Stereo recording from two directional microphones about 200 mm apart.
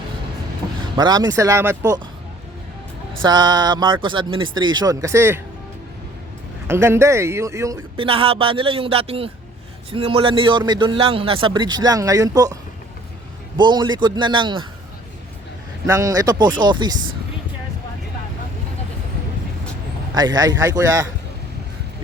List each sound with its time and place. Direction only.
0.9 s a man's voice: 20° right (ahead or behind)
3.2 s a man's voice: 20° right (ahead or behind)
6.7 s speech: 15° right (ahead or behind)
7.9 s a man's voice: 25° right (ahead or behind)
13.6 s a man's voice: 20° right (ahead or behind)
15.9 s a man's voice: 15° right (ahead or behind)
20.1 s a man's voice: 20° right (ahead or behind)